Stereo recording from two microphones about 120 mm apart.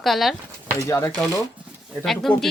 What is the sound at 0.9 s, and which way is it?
Speech, 25° left (ahead or behind).